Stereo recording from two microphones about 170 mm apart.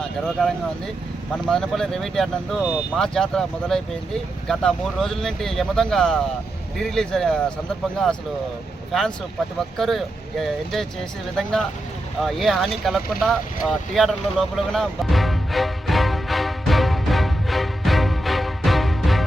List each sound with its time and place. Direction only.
0.0 s speech: centre (ahead or behind)
8.9 s speech: centre (ahead or behind)
12.2 s boat: centre (ahead or behind)